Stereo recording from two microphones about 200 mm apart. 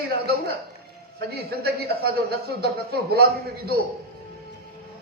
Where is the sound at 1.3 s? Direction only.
50° right (ahead or behind).